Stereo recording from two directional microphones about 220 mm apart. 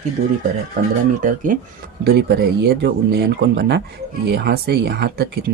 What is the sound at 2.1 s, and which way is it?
Speech, 45° right (ahead or behind).